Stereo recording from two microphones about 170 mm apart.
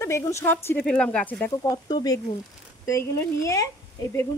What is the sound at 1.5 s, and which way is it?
Speech, 20° left (ahead or behind).